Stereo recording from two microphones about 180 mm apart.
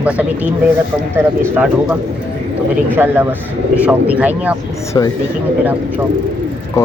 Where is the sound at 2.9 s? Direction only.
10° right (ahead or behind).